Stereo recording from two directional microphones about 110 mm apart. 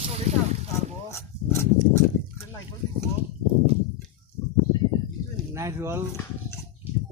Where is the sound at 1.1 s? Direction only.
20° left (ahead or behind).